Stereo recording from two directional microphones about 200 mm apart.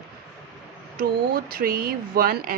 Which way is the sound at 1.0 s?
50° right (ahead or behind).